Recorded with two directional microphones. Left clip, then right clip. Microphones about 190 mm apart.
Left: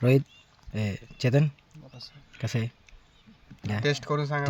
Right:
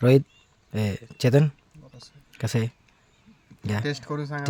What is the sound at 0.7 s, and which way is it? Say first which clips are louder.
Speech: right 4 dB; 30° right (ahead or behind).